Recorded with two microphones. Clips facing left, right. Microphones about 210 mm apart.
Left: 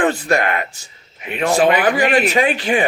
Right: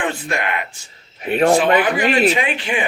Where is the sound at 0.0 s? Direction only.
40° left (ahead or behind).